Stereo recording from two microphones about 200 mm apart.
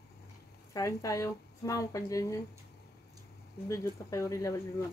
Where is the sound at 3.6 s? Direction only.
15° left (ahead or behind).